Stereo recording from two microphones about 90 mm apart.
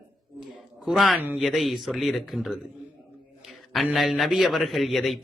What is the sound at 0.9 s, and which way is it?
Speech, centre (ahead or behind).